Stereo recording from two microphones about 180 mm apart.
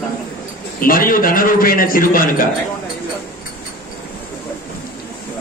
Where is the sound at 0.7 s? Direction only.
50° left (ahead or behind).